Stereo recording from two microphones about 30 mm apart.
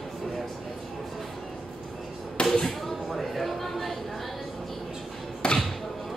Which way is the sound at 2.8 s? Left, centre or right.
Centre.